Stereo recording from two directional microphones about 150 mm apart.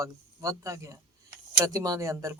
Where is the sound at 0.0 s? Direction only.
20° right (ahead or behind).